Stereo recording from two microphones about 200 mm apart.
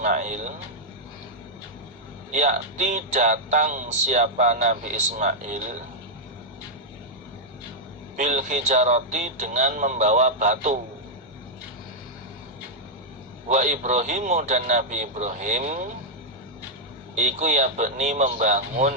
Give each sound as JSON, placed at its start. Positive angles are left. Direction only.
{"t": 0.0, "sound": "a sound", "side_deg": -40}
{"t": 2.3, "sound": "speech", "side_deg": -35}
{"t": 8.1, "sound": "speech", "side_deg": -40}
{"t": 13.5, "sound": "speech", "side_deg": -35}
{"t": 17.2, "sound": "speech", "side_deg": -35}